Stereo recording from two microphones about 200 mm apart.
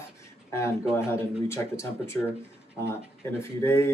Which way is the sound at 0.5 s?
15° left (ahead or behind).